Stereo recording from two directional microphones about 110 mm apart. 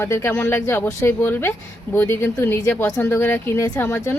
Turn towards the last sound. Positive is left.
turn(degrees=25)  # may be behind; listen again after turning